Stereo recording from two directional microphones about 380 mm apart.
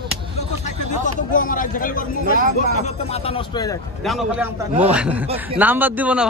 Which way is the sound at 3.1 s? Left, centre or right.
Centre.